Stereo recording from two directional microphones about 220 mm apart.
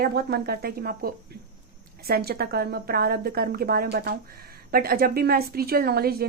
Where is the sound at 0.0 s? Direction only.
45° right (ahead or behind).